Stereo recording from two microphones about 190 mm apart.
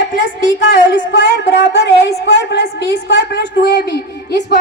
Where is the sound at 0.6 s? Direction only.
70° left (ahead or behind).